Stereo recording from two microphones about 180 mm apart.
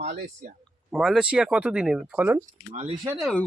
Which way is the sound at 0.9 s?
5° right (ahead or behind).